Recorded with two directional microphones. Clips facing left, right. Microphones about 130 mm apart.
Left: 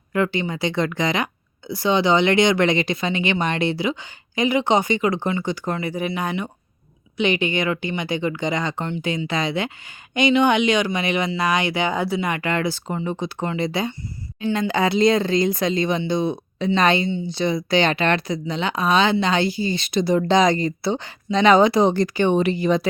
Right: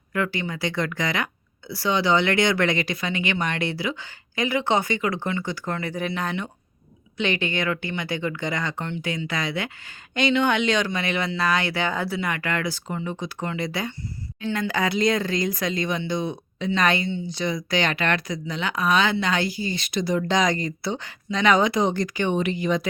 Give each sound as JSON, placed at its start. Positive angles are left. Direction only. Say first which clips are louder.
{"t": 0.1, "sound": "speech", "louder": "left 5 dB", "side_deg": 25}